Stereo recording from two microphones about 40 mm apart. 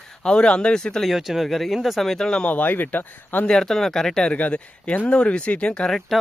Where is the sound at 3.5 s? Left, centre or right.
Centre.